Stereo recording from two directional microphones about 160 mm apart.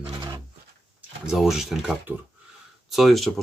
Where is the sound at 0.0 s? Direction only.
20° right (ahead or behind).